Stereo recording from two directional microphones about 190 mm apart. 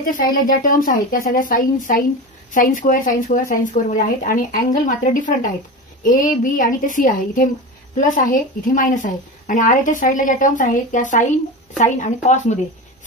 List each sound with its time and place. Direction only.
0.0 s a woman's voice: 45° left (ahead or behind)